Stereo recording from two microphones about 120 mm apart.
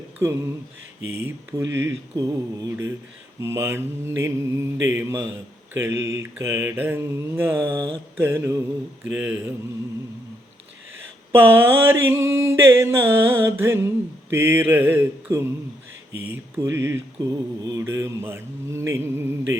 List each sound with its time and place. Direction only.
0.2 s mantra: 20° right (ahead or behind)
9.0 s speech: 10° right (ahead or behind)
11.3 s mantra: 20° right (ahead or behind)